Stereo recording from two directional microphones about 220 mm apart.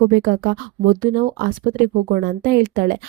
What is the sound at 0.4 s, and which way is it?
Speech, 45° right (ahead or behind).